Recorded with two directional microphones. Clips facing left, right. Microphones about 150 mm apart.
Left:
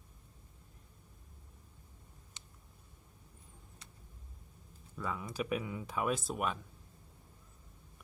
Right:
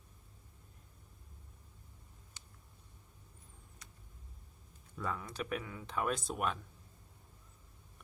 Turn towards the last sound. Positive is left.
turn(degrees=0)  # may be behind; listen again after turning